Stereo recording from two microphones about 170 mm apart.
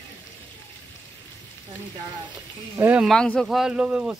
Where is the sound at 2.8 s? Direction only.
10° right (ahead or behind).